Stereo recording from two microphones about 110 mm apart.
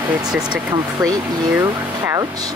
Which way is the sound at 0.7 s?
35° right (ahead or behind).